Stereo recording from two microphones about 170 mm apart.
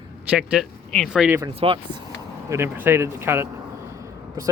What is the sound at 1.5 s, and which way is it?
Speech, 30° right (ahead or behind).